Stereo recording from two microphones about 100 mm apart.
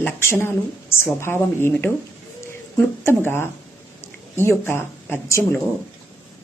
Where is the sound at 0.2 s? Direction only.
25° left (ahead or behind).